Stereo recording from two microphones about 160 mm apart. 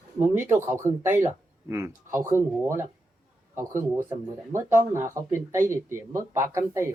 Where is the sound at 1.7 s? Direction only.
20° right (ahead or behind).